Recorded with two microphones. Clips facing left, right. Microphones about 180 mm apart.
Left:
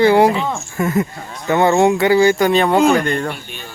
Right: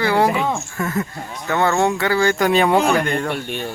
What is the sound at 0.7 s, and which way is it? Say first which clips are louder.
Speech: left 5 dB; 20° left (ahead or behind).